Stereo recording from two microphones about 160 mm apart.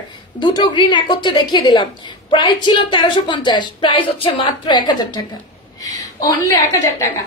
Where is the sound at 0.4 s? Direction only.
30° left (ahead or behind).